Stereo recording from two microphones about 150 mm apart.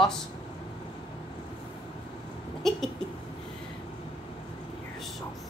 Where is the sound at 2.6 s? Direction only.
Centre (ahead or behind).